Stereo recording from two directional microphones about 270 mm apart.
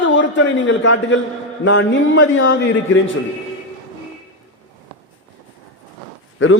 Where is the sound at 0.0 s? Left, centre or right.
Left.